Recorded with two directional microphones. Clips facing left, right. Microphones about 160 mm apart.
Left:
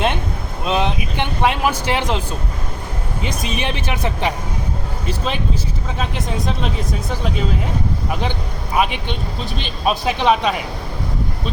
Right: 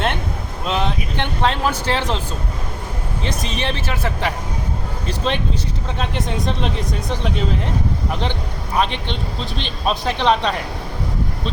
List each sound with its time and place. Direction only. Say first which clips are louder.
0.6 s speech: left 2 dB; 15° left (ahead or behind)
3.2 s speech: even; 15° left (ahead or behind)
5.0 s speech: right 1 dB; 5° left (ahead or behind)
8.1 s speech: left 1 dB; 10° left (ahead or behind)